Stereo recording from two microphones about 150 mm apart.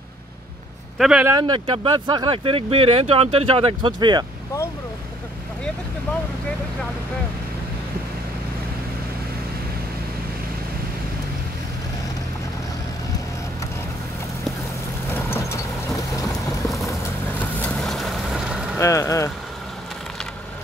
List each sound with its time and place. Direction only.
0.9 s speech: 5° right (ahead or behind)
1.2 s speech: 25° right (ahead or behind)
15.1 s vehicle: 15° left (ahead or behind)
17.4 s vehicle: 10° left (ahead or behind)
18.8 s speech: 20° left (ahead or behind)